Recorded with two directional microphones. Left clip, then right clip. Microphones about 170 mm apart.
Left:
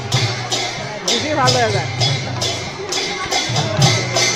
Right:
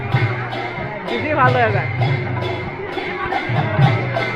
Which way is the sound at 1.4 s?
35° left (ahead or behind).